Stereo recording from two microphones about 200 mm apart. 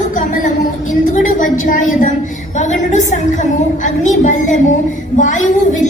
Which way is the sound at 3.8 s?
40° left (ahead or behind).